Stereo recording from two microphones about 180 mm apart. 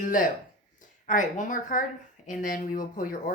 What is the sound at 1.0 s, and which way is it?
Speech, 45° left (ahead or behind).